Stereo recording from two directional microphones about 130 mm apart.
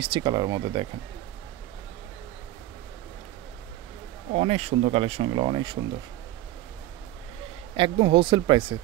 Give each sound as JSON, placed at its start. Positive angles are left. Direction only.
{"t": 0.0, "sound": "speech", "side_deg": -35}
{"t": 4.3, "sound": "speech", "side_deg": -55}
{"t": 7.7, "sound": "speech", "side_deg": -40}